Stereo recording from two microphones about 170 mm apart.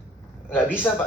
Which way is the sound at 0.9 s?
10° left (ahead or behind).